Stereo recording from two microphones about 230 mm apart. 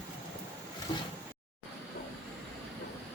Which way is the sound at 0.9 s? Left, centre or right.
Centre.